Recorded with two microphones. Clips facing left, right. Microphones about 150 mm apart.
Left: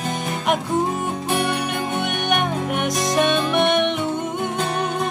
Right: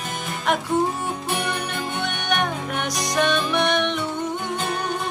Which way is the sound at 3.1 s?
20° left (ahead or behind).